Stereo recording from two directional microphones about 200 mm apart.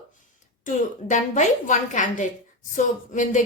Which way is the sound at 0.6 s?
40° left (ahead or behind).